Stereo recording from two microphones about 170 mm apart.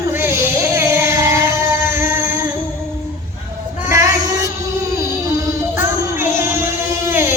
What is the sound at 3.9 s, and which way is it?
Child singing, 20° right (ahead or behind).